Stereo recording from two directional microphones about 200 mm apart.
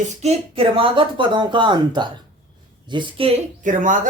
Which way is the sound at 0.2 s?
30° right (ahead or behind).